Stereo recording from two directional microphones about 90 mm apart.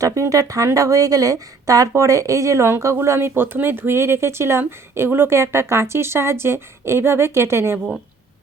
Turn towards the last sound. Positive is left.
turn(degrees=-30)  # may be behind; listen again after turning